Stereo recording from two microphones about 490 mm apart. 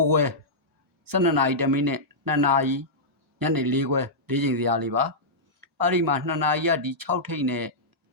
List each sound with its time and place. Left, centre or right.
0.0 s speech: right